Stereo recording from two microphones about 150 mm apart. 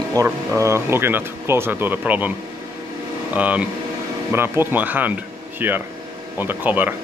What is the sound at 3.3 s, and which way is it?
Speech, 10° right (ahead or behind).